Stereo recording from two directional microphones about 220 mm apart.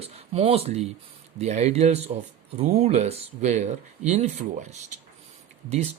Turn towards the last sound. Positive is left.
turn(degrees=-30)  # may be behind; listen again after turning